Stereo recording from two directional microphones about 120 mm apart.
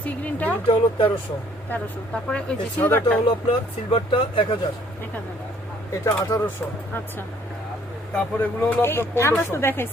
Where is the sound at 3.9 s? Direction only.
45° left (ahead or behind).